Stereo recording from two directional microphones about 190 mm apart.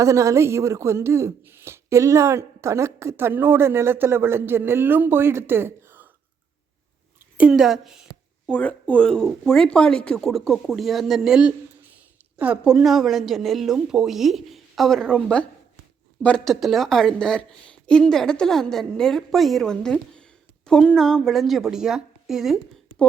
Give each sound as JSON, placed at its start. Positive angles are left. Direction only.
{"t": 0.0, "sound": "speech", "side_deg": -15}
{"t": 7.3, "sound": "speech", "side_deg": -5}